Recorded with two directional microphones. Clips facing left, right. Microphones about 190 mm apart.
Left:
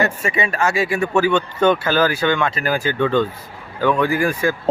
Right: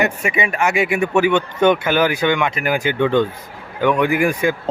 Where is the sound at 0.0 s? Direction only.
15° right (ahead or behind).